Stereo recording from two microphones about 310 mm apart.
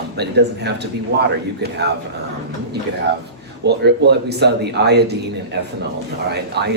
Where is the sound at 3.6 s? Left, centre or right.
Right.